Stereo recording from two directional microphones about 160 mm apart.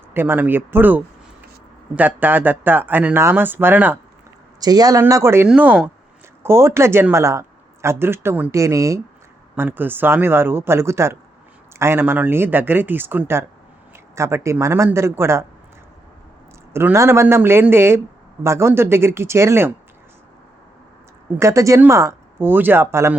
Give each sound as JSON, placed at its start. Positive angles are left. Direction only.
{"t": 0.1, "sound": "speech", "side_deg": -15}
{"t": 4.6, "sound": "speech", "side_deg": -25}
{"t": 16.7, "sound": "speech", "side_deg": -15}
{"t": 21.3, "sound": "speech", "side_deg": -20}